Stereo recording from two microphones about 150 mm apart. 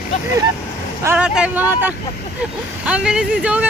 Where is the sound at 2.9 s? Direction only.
5° right (ahead or behind).